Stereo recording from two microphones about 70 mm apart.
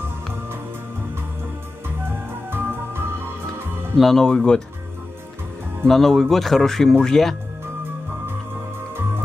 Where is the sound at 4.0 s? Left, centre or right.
Centre.